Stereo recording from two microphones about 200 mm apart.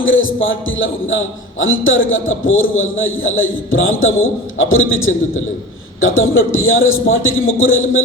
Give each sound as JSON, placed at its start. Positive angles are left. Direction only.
{"t": 0.0, "sound": "a man's voice", "side_deg": 75}